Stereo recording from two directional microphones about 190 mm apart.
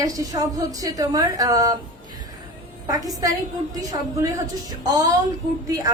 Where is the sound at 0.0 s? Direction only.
20° right (ahead or behind).